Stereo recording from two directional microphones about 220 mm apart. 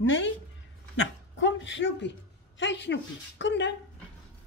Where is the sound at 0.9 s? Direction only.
60° left (ahead or behind).